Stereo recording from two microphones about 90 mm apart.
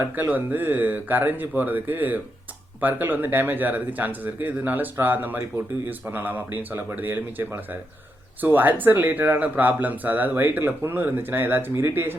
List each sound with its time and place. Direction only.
0.0 s speech: 20° right (ahead or behind)